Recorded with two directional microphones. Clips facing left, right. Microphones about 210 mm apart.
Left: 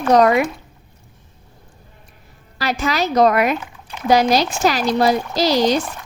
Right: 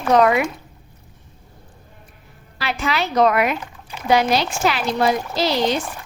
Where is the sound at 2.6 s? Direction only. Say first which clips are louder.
Left 3 dB; 40° left (ahead or behind).